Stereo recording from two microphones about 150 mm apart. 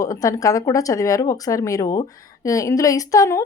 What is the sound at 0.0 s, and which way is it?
Speech, 20° left (ahead or behind).